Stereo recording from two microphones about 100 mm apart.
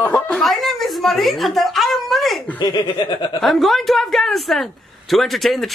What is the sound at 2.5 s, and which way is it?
Laughter, 40° left (ahead or behind).